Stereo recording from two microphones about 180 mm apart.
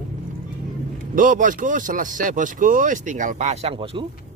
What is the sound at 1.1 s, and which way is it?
Speech, 50° right (ahead or behind).